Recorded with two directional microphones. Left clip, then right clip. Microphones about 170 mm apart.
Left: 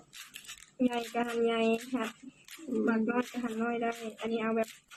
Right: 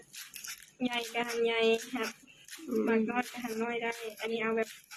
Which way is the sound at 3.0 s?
45° left (ahead or behind).